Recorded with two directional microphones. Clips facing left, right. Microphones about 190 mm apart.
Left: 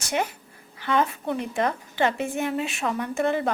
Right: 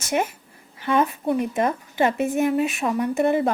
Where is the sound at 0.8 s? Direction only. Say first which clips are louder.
Right 3 dB; 20° right (ahead or behind).